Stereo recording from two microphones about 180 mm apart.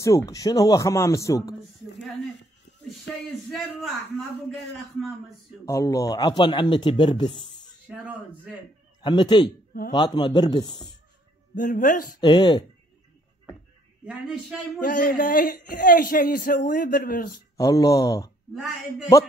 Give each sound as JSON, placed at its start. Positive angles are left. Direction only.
{"t": 0.0, "sound": "speech", "side_deg": 15}
{"t": 3.5, "sound": "a man's voice", "side_deg": 0}
{"t": 5.7, "sound": "speech", "side_deg": 20}
{"t": 7.9, "sound": "speech", "side_deg": -5}
{"t": 9.0, "sound": "speech", "side_deg": 25}
{"t": 11.5, "sound": "speech", "side_deg": 45}
{"t": 12.2, "sound": "speech", "side_deg": 25}
{"t": 14.0, "sound": "a man's voice", "side_deg": -5}
{"t": 14.8, "sound": "speech", "side_deg": 50}
{"t": 17.6, "sound": "speech", "side_deg": 20}
{"t": 18.5, "sound": "a man's voice", "side_deg": 0}